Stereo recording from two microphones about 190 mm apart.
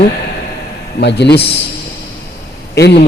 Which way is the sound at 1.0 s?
65° left (ahead or behind).